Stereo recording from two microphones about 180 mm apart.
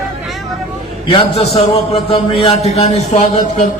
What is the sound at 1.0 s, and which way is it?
A man's voice, 30° left (ahead or behind).